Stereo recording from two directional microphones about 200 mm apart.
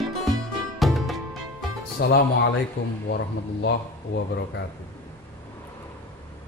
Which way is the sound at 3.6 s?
55° left (ahead or behind).